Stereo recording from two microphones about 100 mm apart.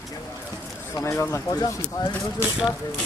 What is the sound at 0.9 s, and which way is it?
Speech, 30° left (ahead or behind).